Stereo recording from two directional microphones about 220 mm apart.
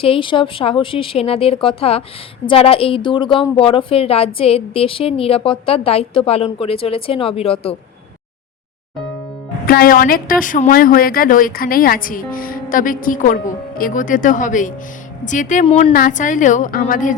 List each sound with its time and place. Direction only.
0.0 s a woman's voice: 25° left (ahead or behind)
9.6 s a woman's voice: 40° left (ahead or behind)
15.9 s a woman's voice: 40° left (ahead or behind)